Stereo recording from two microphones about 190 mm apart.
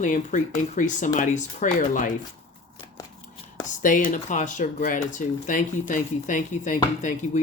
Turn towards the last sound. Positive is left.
turn(degrees=40)  # may be behind; listen again after turning